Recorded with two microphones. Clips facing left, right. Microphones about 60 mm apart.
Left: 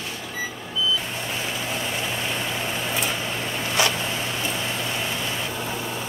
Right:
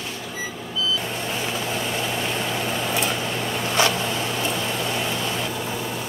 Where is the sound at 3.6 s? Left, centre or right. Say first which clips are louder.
Right 2 dB; right.